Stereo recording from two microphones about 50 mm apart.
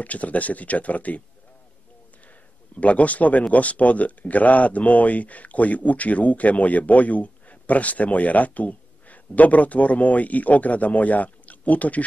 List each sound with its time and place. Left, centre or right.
0.0 s speech: left
2.8 s speech: left